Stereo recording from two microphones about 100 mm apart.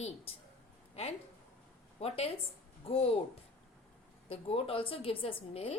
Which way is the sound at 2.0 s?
90° left.